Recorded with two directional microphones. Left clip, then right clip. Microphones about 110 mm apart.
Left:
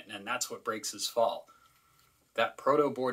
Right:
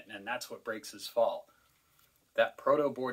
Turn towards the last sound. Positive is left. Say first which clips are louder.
# left 1 dB
turn(degrees=25)  # may be behind; listen again after turning